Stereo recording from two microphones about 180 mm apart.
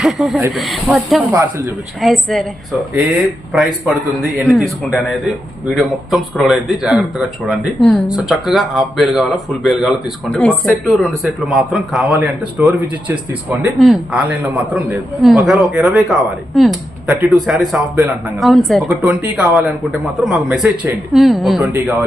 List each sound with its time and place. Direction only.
0.0 s a man's voice: centre (ahead or behind)
1.4 s speech: 15° right (ahead or behind)
2.0 s a man's voice: centre (ahead or behind)
3.5 s a man's voice: centre (ahead or behind)